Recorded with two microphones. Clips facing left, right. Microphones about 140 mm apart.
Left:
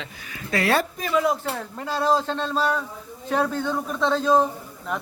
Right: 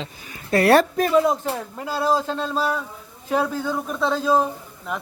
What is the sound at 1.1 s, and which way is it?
Speech, 25° right (ahead or behind).